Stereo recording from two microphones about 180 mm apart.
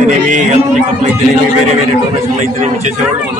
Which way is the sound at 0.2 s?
45° right (ahead or behind).